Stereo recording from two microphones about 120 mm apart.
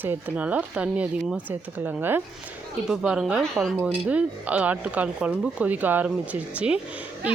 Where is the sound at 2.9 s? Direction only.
5° right (ahead or behind).